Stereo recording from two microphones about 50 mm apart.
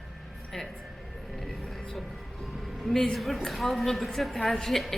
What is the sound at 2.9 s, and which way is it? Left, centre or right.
A woman's voice, centre.